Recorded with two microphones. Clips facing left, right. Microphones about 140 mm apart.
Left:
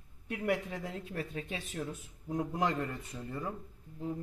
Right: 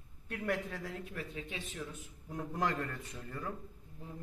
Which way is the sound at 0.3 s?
15° left (ahead or behind).